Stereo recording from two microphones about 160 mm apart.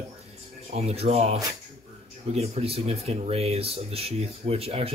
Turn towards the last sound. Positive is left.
turn(degrees=-35)  # may be behind; listen again after turning